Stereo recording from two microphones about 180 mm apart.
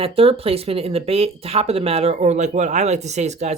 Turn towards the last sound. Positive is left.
turn(degrees=-40)  # may be behind; listen again after turning